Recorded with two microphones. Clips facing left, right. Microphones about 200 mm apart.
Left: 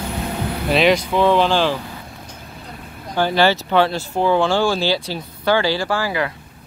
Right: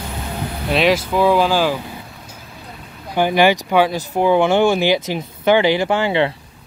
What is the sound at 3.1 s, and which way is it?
Speech, 15° right (ahead or behind).